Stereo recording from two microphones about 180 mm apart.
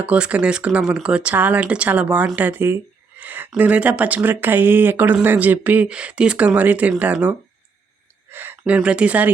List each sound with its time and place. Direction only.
0.0 s speech: 5° right (ahead or behind)